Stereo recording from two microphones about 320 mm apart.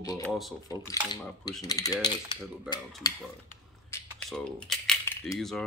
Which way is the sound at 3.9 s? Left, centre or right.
Centre.